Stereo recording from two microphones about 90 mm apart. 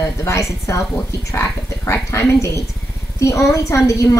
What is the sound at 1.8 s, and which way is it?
A woman's voice, 35° left (ahead or behind).